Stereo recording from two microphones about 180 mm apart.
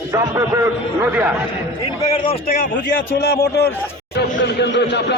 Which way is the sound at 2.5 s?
45° left (ahead or behind).